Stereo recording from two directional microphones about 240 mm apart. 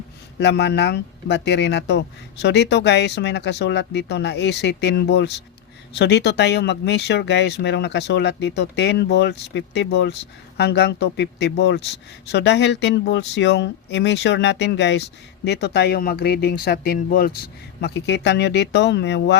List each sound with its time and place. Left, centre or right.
0.3 s speech: left